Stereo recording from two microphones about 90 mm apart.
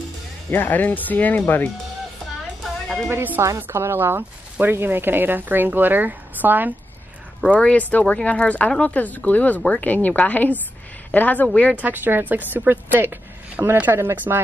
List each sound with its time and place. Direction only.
0.5 s speech: 20° left (ahead or behind)
3.1 s speech: 25° right (ahead or behind)
7.5 s speech: 15° left (ahead or behind)
11.7 s speech: 20° right (ahead or behind)